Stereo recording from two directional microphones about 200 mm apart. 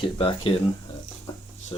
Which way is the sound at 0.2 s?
25° left (ahead or behind).